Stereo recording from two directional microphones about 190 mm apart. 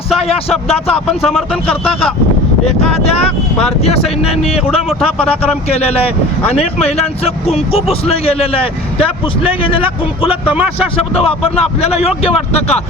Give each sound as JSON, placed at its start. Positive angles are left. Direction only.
{"t": 0.3, "sound": "a man's voice", "side_deg": 30}
{"t": 1.2, "sound": "speech", "side_deg": 0}
{"t": 1.6, "sound": "a man's voice", "side_deg": 30}
{"t": 10.5, "sound": "speech", "side_deg": -5}
{"t": 10.9, "sound": "a man's voice", "side_deg": 30}